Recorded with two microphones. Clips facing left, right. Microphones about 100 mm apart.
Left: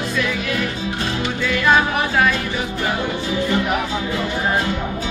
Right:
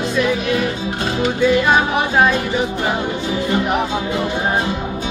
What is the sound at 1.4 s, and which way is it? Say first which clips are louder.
Music: right 2 dB; 20° right (ahead or behind).